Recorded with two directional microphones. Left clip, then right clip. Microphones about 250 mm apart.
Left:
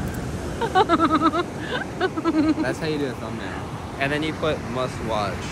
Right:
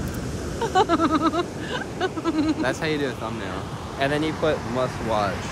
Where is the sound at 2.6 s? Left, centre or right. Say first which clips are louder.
Right 1 dB; centre.